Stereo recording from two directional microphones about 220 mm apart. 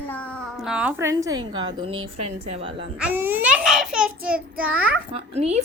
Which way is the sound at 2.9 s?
5° right (ahead or behind).